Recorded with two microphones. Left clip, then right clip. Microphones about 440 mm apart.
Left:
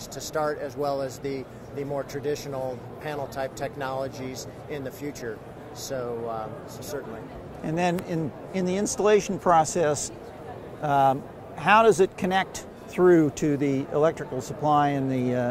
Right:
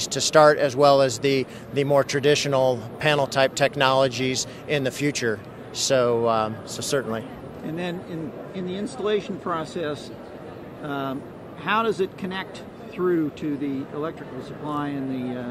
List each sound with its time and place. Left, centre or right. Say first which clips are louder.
0.0 s speech: right 13 dB; right
7.6 s speech: left 5 dB; left